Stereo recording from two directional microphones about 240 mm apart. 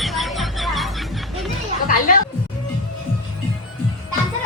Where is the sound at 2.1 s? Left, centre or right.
Left.